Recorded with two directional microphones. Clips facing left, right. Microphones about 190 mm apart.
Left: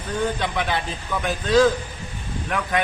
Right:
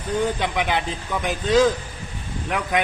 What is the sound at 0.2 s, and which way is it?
A man's voice, 15° right (ahead or behind).